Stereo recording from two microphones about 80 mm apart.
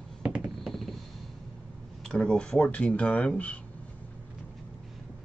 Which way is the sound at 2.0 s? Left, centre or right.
Centre.